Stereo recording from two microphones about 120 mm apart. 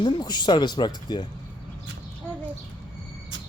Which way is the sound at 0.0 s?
40° left (ahead or behind).